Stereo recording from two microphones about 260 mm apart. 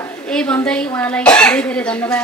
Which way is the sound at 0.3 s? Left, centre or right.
Centre.